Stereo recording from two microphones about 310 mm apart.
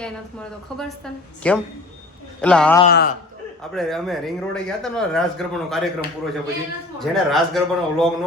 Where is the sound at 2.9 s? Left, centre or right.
Left.